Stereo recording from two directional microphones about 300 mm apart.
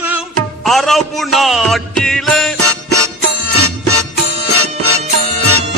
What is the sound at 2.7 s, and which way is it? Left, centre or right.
Music, right.